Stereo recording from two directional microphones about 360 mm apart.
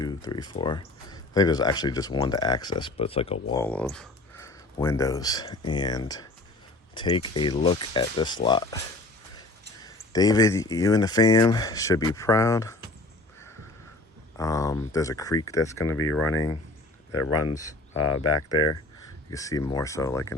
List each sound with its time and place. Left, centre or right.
0.0 s speech: centre
9.8 s speech: centre
14.3 s speech: centre
15.8 s speech: left
16.3 s speech: centre
17.1 s speech: left
17.5 s speech: centre
17.9 s speech: left
18.4 s speech: centre